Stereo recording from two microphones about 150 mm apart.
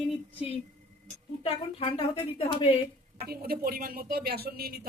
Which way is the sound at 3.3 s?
90° right.